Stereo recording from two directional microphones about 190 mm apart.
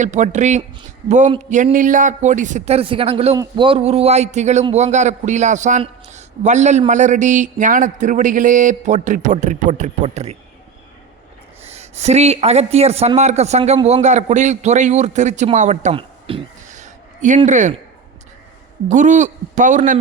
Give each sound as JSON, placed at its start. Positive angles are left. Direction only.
{"t": 0.0, "sound": "a man's voice", "side_deg": -40}
{"t": 3.3, "sound": "a man's voice", "side_deg": -20}
{"t": 11.6, "sound": "a man's voice", "side_deg": -35}
{"t": 18.9, "sound": "a man's voice", "side_deg": -40}